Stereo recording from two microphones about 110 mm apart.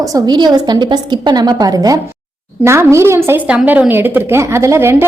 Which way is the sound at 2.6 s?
25° right (ahead or behind).